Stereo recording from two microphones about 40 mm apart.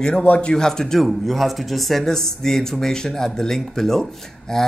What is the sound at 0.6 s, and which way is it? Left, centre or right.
Speech, centre.